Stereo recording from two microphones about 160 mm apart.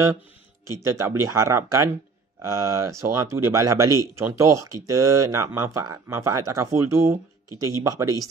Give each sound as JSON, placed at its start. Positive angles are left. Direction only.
{"t": 0.8, "sound": "speech", "side_deg": -15}